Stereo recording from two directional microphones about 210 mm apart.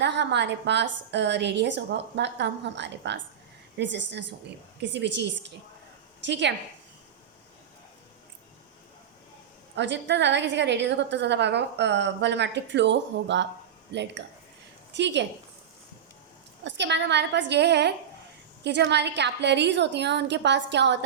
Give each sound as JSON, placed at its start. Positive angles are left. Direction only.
{"t": 0.0, "sound": "a woman's voice", "side_deg": -55}
{"t": 9.7, "sound": "a woman's voice", "side_deg": -55}
{"t": 16.6, "sound": "a woman's voice", "side_deg": -55}